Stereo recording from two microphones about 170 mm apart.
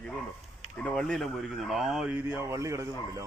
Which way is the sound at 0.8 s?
5° left (ahead or behind).